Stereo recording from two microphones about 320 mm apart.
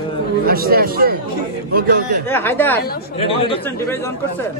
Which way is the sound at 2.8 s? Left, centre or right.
Centre.